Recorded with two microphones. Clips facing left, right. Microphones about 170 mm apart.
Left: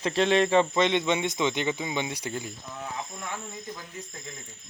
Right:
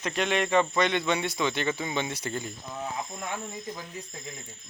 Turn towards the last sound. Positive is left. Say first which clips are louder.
# right 2 dB
turn(degrees=-20)  # may be behind; listen again after turning